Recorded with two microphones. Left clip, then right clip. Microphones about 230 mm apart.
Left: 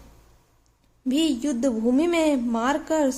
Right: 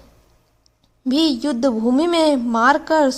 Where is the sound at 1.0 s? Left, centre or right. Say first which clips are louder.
Right 5 dB; right.